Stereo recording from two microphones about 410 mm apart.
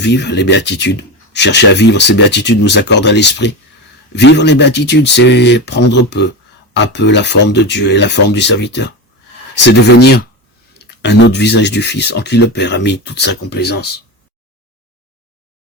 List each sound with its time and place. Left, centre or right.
0.0 s speech: left